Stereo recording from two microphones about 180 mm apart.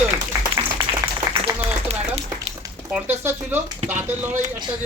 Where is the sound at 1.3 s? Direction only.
20° right (ahead or behind).